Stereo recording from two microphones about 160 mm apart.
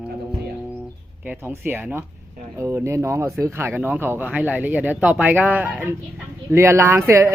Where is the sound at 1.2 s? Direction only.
15° right (ahead or behind).